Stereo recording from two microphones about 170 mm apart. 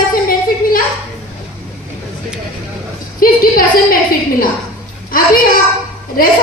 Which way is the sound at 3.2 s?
55° left (ahead or behind).